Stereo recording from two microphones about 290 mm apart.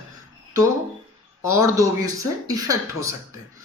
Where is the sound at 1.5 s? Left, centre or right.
Centre.